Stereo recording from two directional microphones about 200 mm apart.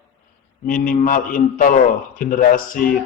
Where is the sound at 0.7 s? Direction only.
40° left (ahead or behind).